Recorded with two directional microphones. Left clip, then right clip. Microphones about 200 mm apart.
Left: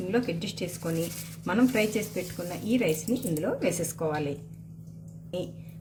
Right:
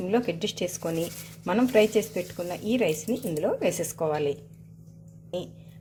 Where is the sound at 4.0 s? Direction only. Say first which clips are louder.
Right 4 dB; 40° right (ahead or behind).